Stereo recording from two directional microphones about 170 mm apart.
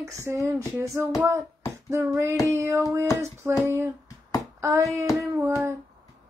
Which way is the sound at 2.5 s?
15° right (ahead or behind).